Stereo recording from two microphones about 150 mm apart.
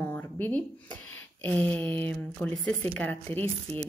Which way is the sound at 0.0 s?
15° left (ahead or behind).